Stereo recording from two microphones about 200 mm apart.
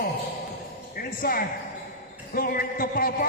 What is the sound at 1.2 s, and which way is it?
Speech, 45° left (ahead or behind).